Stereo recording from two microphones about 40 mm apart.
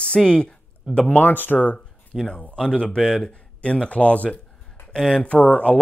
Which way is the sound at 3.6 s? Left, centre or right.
Left.